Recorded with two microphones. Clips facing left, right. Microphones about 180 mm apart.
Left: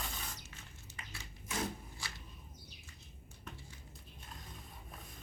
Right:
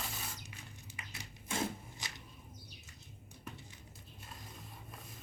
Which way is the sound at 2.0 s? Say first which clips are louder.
Even; 20° right (ahead or behind).